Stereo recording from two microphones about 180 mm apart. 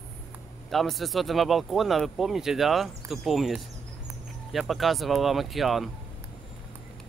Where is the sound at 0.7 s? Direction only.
Centre (ahead or behind).